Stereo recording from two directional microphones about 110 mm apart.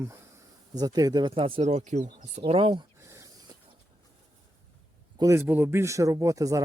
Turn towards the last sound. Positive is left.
turn(degrees=-30)  # may be behind; listen again after turning